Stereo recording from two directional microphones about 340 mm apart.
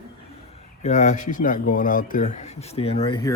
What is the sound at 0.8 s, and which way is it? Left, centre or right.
Speech, left.